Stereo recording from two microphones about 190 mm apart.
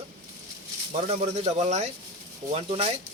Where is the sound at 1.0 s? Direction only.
35° right (ahead or behind).